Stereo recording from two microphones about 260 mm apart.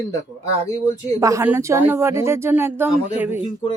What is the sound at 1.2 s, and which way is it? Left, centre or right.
Speech, centre.